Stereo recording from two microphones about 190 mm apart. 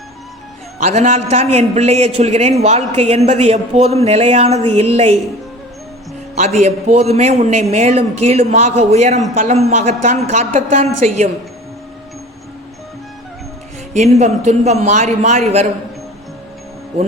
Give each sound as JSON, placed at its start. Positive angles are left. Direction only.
{"t": 0.8, "sound": "a man's voice", "side_deg": -40}
{"t": 6.3, "sound": "a man's voice", "side_deg": -35}
{"t": 13.9, "sound": "a man's voice", "side_deg": -35}